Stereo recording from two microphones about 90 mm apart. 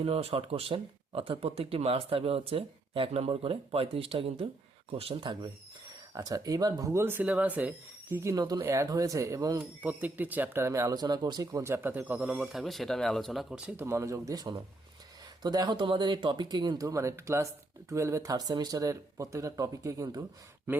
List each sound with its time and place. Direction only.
0.0 s speech: 90° right; by 5.5 s 65° right (ahead or behind)
6.1 s speech: 40° right (ahead or behind)
6.9 s speech: 25° right (ahead or behind)
8.1 s speech: 30° right (ahead or behind)
8.4 s speech: 50° right (ahead or behind)
8.6 s speech: 35° right (ahead or behind)
9.6 s speech: 20° right (ahead or behind); by 11.4 s 50° right (ahead or behind)
11.5 s speech: 30° right (ahead or behind); by 13.6 s centre (ahead or behind)
13.6 s speech: 15° right (ahead or behind)
13.8 s speech: 30° right (ahead or behind)